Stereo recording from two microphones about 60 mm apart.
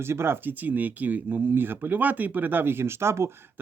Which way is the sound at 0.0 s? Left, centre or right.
Right.